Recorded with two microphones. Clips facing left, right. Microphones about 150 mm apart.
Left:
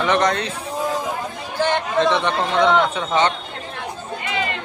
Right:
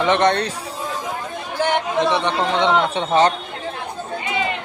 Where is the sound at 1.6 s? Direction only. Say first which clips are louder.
Left 1 dB; 15° right (ahead or behind).